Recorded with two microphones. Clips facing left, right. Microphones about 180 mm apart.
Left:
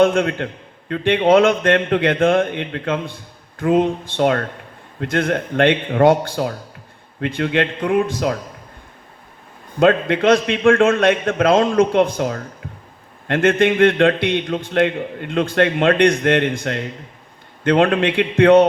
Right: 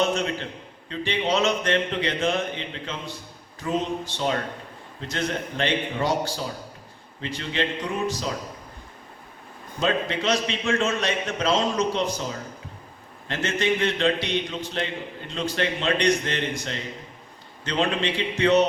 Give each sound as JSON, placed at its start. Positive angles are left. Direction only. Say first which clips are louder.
{"t": 0.0, "sound": "a man's voice", "louder": "left 9 dB", "side_deg": 55}
{"t": 9.8, "sound": "a man's voice", "louder": "left 10 dB", "side_deg": 55}